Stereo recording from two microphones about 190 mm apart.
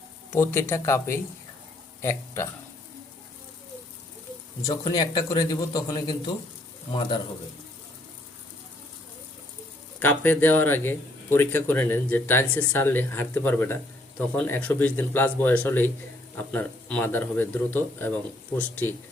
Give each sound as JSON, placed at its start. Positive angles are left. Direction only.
{"t": 0.3, "sound": "speech", "side_deg": 15}
{"t": 4.6, "sound": "a man's voice", "side_deg": 20}
{"t": 10.0, "sound": "speech", "side_deg": 10}